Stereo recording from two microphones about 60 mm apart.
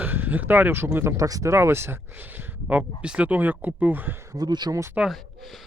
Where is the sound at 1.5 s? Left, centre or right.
Right.